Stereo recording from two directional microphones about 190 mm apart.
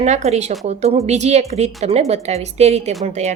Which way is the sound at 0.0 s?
35° right (ahead or behind).